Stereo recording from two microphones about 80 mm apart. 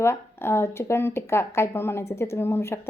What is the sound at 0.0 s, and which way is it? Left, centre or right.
A woman's voice, left.